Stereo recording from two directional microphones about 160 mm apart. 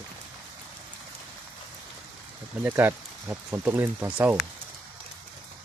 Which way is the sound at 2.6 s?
15° right (ahead or behind).